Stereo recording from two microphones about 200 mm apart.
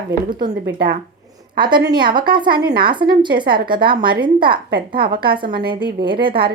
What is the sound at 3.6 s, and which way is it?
Speech, 45° right (ahead or behind).